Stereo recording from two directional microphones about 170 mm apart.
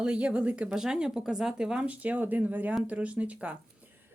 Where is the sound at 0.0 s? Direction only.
5° right (ahead or behind).